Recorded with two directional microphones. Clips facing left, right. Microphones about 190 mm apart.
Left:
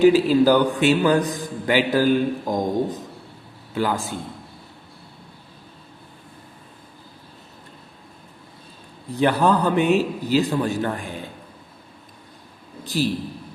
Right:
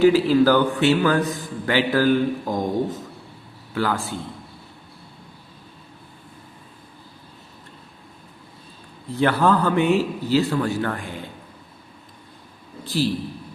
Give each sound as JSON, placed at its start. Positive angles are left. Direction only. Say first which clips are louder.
{"t": 0.0, "sound": "a man's voice", "louder": "left 1 dB", "side_deg": 15}
{"t": 9.1, "sound": "a man's voice", "louder": "even", "side_deg": 15}